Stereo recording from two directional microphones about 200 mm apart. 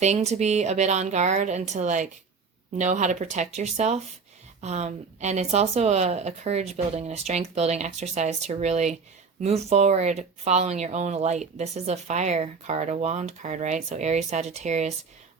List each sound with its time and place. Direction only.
0.0 s speech: 35° right (ahead or behind)